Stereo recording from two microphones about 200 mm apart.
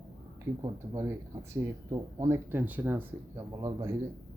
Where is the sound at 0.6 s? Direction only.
15° right (ahead or behind).